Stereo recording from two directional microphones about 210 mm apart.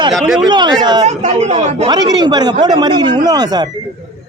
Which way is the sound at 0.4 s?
20° right (ahead or behind).